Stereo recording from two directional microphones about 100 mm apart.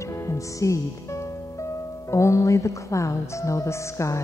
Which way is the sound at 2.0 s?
30° left (ahead or behind).